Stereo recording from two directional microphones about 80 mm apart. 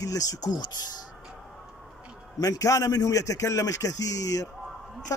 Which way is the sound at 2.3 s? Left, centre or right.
Left.